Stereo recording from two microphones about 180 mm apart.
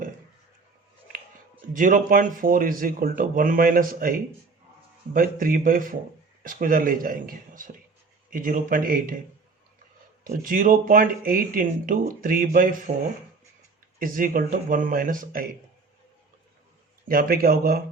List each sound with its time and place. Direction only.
1.7 s speech: 50° right (ahead or behind)
10.2 s speech: 55° right (ahead or behind)
14.0 s speech: 50° right (ahead or behind)
17.1 s speech: 55° right (ahead or behind)